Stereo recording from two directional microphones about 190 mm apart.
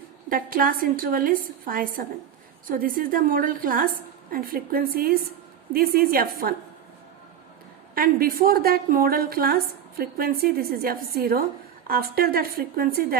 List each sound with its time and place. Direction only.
0.3 s a woman's voice: 50° right (ahead or behind)
7.9 s a woman's voice: 50° right (ahead or behind)